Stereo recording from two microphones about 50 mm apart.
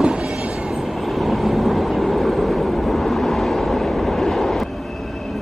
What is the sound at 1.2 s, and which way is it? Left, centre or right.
Vehicle, centre.